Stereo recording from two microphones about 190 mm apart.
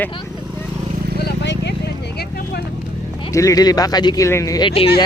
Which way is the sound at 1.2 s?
65° left (ahead or behind).